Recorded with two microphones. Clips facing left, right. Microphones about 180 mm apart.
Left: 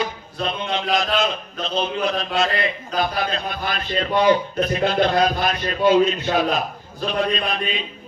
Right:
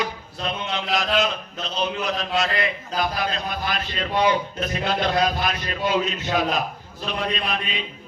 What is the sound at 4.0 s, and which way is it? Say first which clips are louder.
A man's voice: left 4 dB; 45° left (ahead or behind).